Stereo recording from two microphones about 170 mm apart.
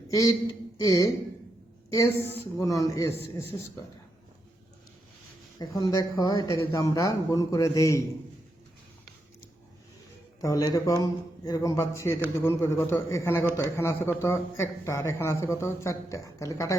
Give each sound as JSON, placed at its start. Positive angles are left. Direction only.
{"t": 0.1, "sound": "speech", "side_deg": 20}
{"t": 5.5, "sound": "speech", "side_deg": 20}
{"t": 10.4, "sound": "a man's voice", "side_deg": 20}